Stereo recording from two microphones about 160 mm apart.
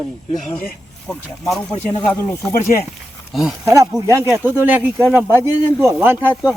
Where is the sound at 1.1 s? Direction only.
Centre (ahead or behind).